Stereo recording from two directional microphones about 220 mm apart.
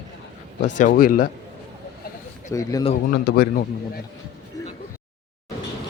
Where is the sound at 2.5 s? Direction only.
15° left (ahead or behind).